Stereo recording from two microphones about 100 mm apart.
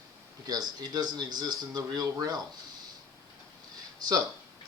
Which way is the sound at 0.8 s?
45° right (ahead or behind).